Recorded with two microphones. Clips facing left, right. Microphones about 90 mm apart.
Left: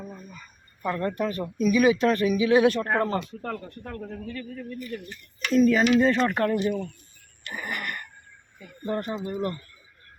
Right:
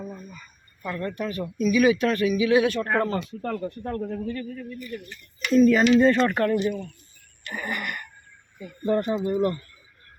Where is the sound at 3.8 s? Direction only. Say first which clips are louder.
Right 7 dB; 40° right (ahead or behind).